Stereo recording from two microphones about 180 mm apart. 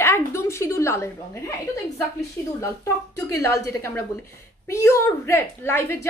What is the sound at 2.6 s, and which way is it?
A woman's voice, 15° left (ahead or behind).